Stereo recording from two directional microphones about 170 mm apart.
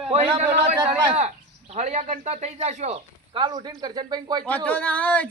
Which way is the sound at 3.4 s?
25° right (ahead or behind).